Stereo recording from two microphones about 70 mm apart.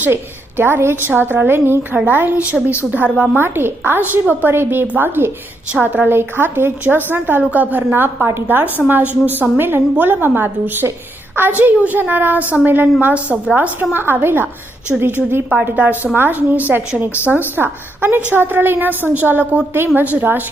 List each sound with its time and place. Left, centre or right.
0.0 s a woman's voice: right; by 13.6 s centre
13.6 s a woman's voice: right